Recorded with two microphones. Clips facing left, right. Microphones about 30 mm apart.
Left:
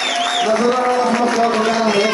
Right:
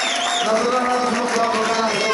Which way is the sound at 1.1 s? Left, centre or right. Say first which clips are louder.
Left 4 dB; centre.